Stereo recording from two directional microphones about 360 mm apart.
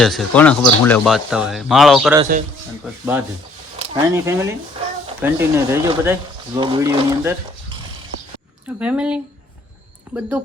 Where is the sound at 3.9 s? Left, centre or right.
Centre.